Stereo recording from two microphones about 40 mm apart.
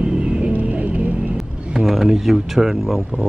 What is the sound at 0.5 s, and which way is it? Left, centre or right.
Music, right.